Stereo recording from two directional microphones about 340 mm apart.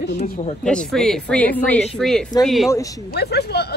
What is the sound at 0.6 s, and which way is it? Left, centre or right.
Speech, centre.